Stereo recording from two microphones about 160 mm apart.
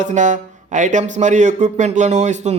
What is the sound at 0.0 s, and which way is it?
Speech, 50° right (ahead or behind).